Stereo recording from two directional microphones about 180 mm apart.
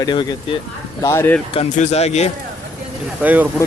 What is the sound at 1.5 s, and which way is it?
Speech, 35° left (ahead or behind).